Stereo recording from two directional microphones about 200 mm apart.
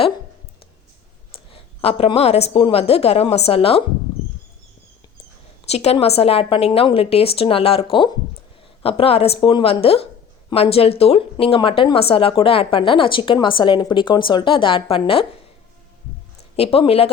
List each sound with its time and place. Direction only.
1.5 s speech: 30° left (ahead or behind)
5.6 s speech: 30° left (ahead or behind)
16.4 s speech: 30° left (ahead or behind)